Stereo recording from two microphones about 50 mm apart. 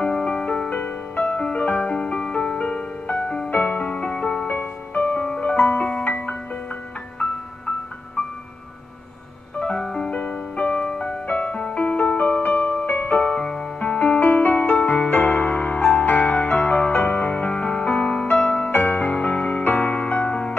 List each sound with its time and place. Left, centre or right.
0.0 s music: left
5.6 s music: left
9.6 s music: left
13.8 s music: left
18.7 s music: left
19.6 s music: left
20.2 s music: left